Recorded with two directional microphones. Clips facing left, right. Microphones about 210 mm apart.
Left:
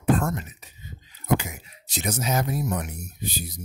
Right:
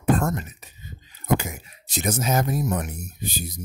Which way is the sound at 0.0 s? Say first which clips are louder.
Right 1 dB; 45° right (ahead or behind).